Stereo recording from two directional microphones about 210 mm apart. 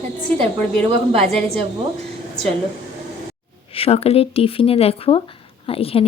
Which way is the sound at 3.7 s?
30° left (ahead or behind).